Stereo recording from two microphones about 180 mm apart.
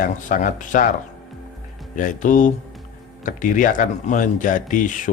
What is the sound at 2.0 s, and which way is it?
Speech, 45° left (ahead or behind).